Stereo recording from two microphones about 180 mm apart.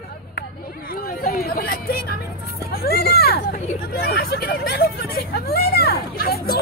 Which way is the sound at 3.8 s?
55° left (ahead or behind).